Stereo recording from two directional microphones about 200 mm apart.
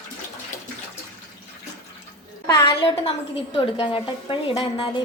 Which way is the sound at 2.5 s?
25° left (ahead or behind).